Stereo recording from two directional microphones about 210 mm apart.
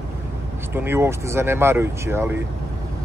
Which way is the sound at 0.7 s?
10° right (ahead or behind).